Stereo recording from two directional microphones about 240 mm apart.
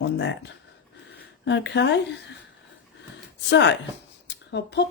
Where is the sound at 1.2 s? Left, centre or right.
Left.